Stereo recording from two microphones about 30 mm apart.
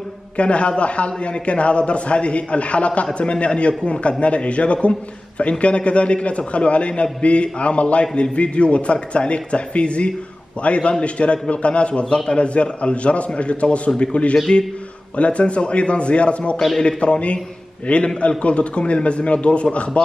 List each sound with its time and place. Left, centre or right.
0.4 s a man's voice: left